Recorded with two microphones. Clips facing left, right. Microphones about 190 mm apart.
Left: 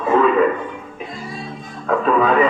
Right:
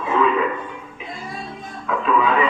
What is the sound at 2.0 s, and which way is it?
Music, 45° left (ahead or behind).